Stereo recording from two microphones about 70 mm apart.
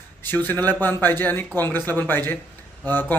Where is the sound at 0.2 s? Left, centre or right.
Left.